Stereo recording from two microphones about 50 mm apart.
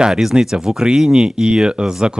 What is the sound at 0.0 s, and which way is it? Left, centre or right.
Speech, centre.